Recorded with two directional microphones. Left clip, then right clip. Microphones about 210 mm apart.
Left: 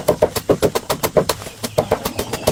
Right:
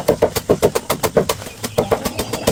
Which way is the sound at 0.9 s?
15° left (ahead or behind).